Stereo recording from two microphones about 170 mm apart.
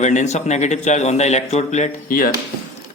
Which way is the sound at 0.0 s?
45° left (ahead or behind).